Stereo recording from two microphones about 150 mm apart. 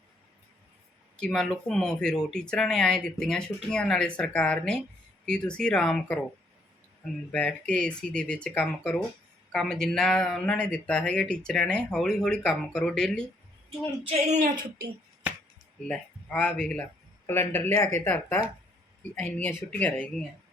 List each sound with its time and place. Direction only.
1.2 s speech: 5° left (ahead or behind)
7.3 s speech: 10° left (ahead or behind)
14.1 s speech: 55° right (ahead or behind)
15.9 s speech: 10° left (ahead or behind)